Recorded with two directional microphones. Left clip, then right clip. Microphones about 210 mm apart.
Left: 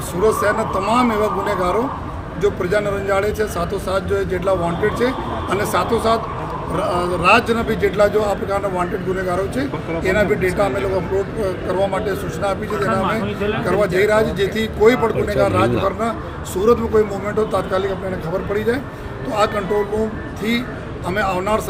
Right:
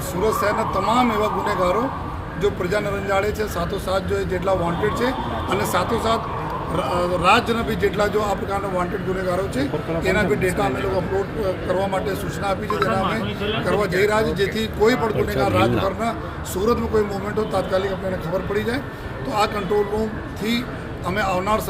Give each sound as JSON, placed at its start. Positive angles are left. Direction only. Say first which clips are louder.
{"t": 0.2, "sound": "speech", "louder": "left 4 dB", "side_deg": 0}
{"t": 21.1, "sound": "speech", "louder": "left 2 dB", "side_deg": 0}